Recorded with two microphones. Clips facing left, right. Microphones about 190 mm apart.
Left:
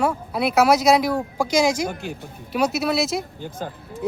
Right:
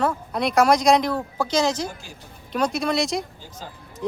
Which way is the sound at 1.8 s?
60° left (ahead or behind).